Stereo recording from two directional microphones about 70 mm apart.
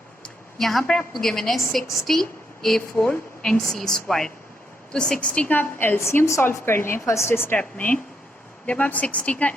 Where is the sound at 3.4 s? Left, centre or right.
Centre.